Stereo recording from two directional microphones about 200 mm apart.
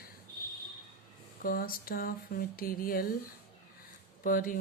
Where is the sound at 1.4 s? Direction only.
45° left (ahead or behind).